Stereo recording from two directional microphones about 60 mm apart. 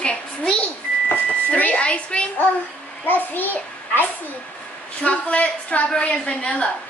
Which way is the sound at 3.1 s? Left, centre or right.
Left.